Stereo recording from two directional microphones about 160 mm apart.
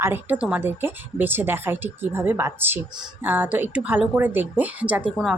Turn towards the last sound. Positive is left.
turn(degrees=-10)  # may be behind; listen again after turning